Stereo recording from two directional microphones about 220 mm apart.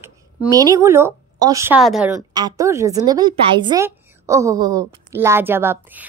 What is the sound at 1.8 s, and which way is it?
Speech, centre (ahead or behind).